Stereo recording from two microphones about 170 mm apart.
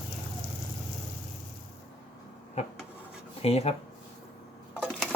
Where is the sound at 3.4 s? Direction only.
35° left (ahead or behind).